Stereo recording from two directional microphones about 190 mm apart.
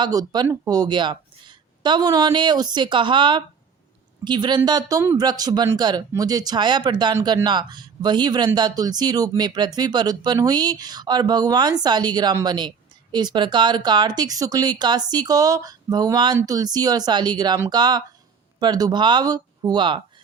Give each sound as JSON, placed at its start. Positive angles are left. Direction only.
{"t": 0.0, "sound": "speech", "side_deg": -20}